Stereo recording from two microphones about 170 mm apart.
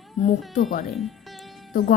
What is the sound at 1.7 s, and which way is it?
Music, 55° left (ahead or behind).